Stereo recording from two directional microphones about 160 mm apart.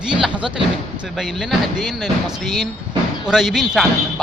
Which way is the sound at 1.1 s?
Centre (ahead or behind).